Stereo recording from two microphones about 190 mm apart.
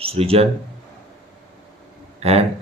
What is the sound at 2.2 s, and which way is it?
Speech, 30° right (ahead or behind).